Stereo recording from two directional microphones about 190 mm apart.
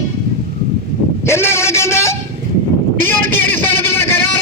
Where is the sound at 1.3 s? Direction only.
15° left (ahead or behind).